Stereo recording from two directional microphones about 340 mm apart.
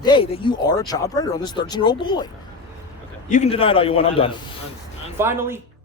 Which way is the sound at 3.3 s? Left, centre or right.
Centre.